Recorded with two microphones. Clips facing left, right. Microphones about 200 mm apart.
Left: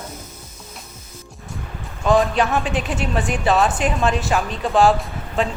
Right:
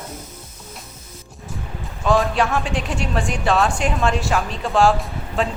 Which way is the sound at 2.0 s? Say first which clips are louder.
Left 1 dB; centre (ahead or behind).